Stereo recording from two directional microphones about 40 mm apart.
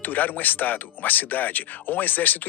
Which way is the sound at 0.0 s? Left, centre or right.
Left.